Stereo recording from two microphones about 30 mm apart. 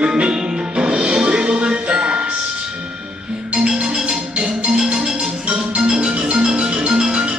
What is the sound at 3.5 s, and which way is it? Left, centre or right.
Music, right.